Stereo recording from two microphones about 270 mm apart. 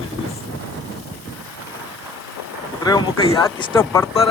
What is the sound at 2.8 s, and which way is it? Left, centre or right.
Speech, centre.